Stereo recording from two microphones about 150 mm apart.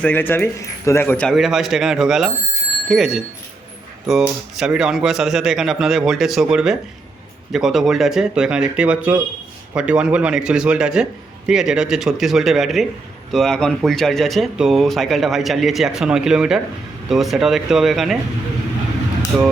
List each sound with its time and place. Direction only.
0.0 s speech: 10° left (ahead or behind)
1.4 s speech: centre (ahead or behind)
19.3 s speech: 10° right (ahead or behind)